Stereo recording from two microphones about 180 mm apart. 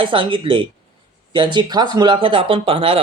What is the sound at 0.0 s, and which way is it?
A man's voice, 30° right (ahead or behind).